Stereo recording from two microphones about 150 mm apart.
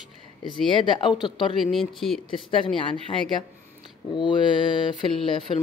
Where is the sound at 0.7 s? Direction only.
30° left (ahead or behind).